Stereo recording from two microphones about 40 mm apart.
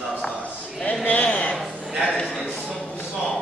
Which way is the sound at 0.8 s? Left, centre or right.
Left.